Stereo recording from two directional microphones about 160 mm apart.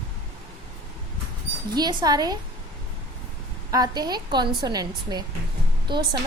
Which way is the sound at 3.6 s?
25° right (ahead or behind).